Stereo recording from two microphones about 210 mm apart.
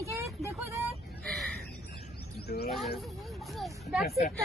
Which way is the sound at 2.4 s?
50° left (ahead or behind).